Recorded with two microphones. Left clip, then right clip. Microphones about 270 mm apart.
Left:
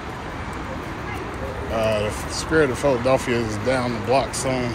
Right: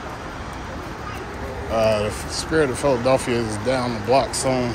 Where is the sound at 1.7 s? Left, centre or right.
Centre.